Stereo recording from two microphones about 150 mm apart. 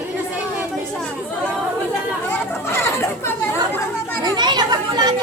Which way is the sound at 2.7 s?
15° left (ahead or behind).